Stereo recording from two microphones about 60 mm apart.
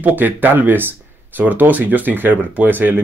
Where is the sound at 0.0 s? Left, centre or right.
Right.